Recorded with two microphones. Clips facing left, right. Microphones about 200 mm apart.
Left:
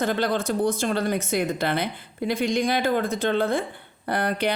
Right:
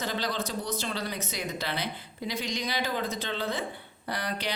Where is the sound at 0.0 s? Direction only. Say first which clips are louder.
Left 8 dB; 55° left (ahead or behind).